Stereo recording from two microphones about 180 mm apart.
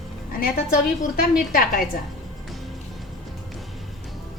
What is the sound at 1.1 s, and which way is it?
Speech, 55° left (ahead or behind).